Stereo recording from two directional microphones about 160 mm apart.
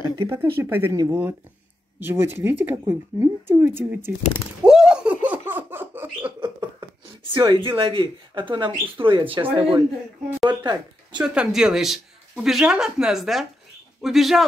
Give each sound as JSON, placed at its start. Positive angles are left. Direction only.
{"t": 0.2, "sound": "speech", "side_deg": -15}
{"t": 4.6, "sound": "laughter", "side_deg": -5}
{"t": 6.8, "sound": "speech", "side_deg": -30}
{"t": 11.1, "sound": "speech", "side_deg": -5}